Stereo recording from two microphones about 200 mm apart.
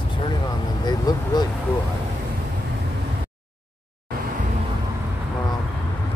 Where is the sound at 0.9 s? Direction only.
20° left (ahead or behind).